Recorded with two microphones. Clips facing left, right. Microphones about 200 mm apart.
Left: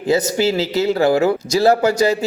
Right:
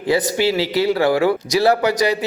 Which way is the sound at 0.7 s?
25° left (ahead or behind).